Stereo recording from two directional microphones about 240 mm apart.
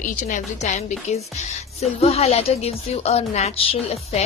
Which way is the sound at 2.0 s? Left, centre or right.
Left.